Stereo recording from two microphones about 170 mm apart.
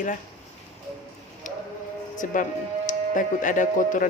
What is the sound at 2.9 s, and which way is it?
Speech, 50° left (ahead or behind).